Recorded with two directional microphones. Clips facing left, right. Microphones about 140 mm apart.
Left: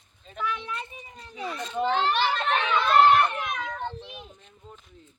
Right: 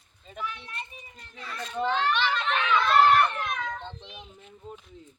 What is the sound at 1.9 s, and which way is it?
Speech, 45° left (ahead or behind).